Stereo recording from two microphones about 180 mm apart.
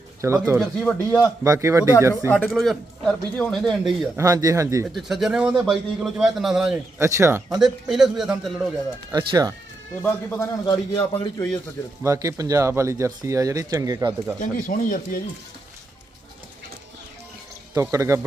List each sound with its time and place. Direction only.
0.2 s speech: 15° right (ahead or behind)
0.9 s speech: 10° left (ahead or behind)
1.5 s speech: 15° right (ahead or behind)
2.3 s speech: 5° left (ahead or behind)
4.2 s speech: 20° right (ahead or behind)
4.9 s speech: centre (ahead or behind)
7.0 s speech: 15° right (ahead or behind)
7.6 s speech: centre (ahead or behind)
9.1 s speech: 20° right (ahead or behind)
10.0 s speech: 10° left (ahead or behind)
10.7 s a man's voice: 20° left (ahead or behind)
12.0 s speech: 15° right (ahead or behind)
14.3 s speech: 50° left (ahead or behind)
17.7 s speech: 15° right (ahead or behind)